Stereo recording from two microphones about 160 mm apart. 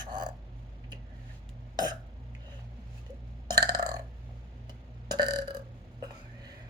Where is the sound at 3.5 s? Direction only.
25° right (ahead or behind).